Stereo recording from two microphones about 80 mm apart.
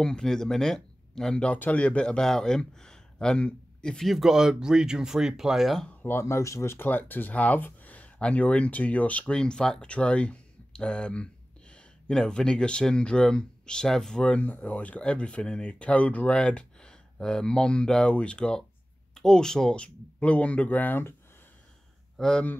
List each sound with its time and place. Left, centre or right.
0.0 s speech: centre
6.0 s speech: left
22.1 s a sound: centre